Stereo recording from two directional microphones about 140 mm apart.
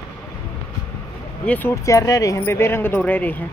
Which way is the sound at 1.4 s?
10° left (ahead or behind).